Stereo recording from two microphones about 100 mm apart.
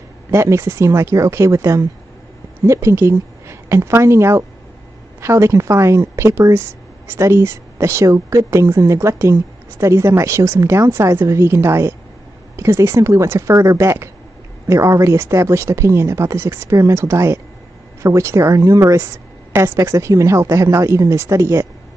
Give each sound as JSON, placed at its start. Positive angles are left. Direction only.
{"t": 0.3, "sound": "speech", "side_deg": -30}